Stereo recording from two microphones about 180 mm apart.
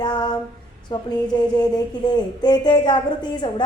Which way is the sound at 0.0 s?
25° left (ahead or behind).